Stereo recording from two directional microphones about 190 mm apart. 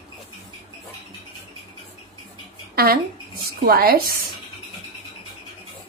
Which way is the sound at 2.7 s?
50° right (ahead or behind).